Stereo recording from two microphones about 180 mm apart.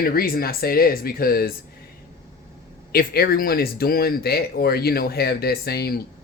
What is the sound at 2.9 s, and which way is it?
Speech, 55° left (ahead or behind).